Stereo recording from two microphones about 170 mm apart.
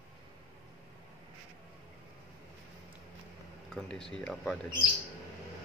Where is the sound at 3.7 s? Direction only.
5° left (ahead or behind).